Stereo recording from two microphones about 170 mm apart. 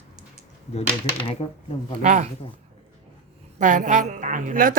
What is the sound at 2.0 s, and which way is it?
Speech, 50° right (ahead or behind).